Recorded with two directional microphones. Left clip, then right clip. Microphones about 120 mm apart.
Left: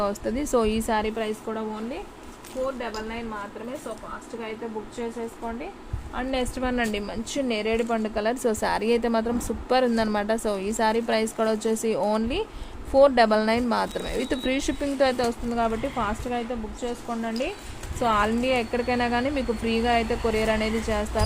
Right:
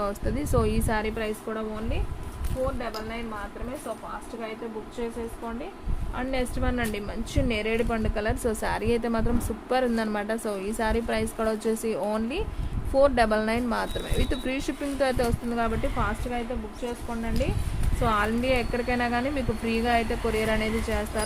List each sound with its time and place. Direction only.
0.0 s a woman's voice: 45° left (ahead or behind)
6.1 s speech: 70° left (ahead or behind)
7.3 s a woman's voice: 40° left (ahead or behind)
15.5 s a woman's voice: 30° left (ahead or behind)
18.0 s speech: 55° left (ahead or behind)